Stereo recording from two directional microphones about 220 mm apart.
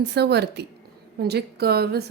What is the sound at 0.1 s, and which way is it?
A woman's voice, 50° right (ahead or behind).